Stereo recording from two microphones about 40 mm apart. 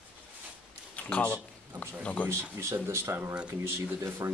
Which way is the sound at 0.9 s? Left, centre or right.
Left.